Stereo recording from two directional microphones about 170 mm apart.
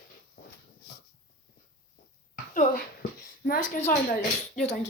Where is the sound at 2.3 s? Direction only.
55° left (ahead or behind).